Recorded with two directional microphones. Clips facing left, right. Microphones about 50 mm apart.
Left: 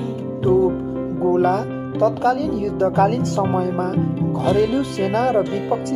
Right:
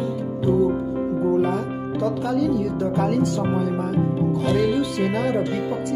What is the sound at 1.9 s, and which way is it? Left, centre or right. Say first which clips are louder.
Speech: left 5 dB; left.